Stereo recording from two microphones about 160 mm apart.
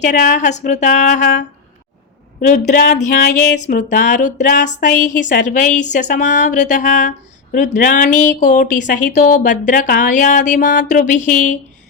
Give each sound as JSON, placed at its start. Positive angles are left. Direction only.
{"t": 0.3, "sound": "speech", "side_deg": 50}